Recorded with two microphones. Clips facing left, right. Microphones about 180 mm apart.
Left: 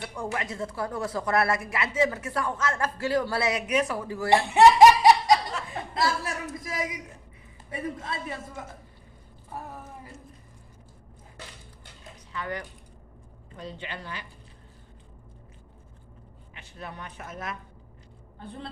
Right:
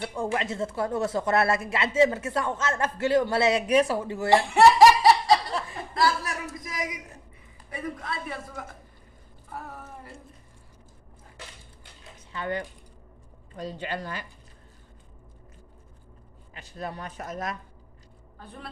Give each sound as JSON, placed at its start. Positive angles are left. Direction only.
{"t": 0.3, "sound": "speech", "side_deg": -25}
{"t": 4.4, "sound": "laughter", "side_deg": 20}
{"t": 5.9, "sound": "a man's voice", "side_deg": 25}
{"t": 12.3, "sound": "speech", "side_deg": -25}
{"t": 13.6, "sound": "speech", "side_deg": -40}
{"t": 16.6, "sound": "speech", "side_deg": -40}
{"t": 18.3, "sound": "a man's voice", "side_deg": 25}